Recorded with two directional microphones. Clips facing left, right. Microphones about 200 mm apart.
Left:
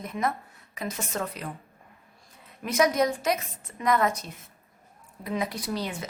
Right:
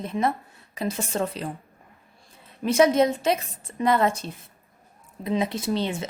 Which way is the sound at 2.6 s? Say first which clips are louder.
Right 5 dB; 30° right (ahead or behind).